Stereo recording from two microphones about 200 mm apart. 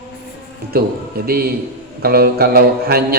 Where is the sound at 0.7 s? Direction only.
50° right (ahead or behind).